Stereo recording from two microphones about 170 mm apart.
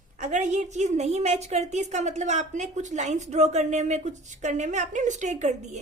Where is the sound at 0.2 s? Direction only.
45° right (ahead or behind).